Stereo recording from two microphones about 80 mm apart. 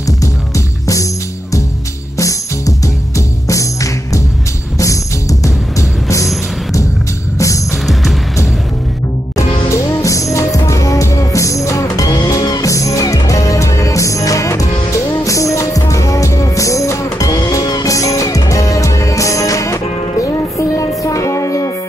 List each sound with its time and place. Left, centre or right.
2.1 s music: left
5.4 s music: left
7.3 s music: left
9.7 s music: left
12.1 s music: left